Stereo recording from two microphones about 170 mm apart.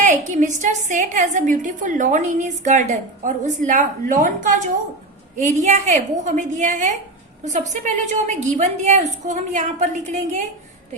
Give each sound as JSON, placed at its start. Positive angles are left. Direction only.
{"t": 0.0, "sound": "a woman's voice", "side_deg": -45}